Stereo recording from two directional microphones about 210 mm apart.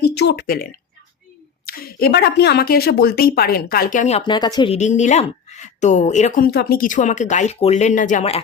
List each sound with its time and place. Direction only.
0.0 s a woman's voice: 55° left (ahead or behind); by 4.2 s 35° left (ahead or behind)
4.3 s speech: 20° left (ahead or behind)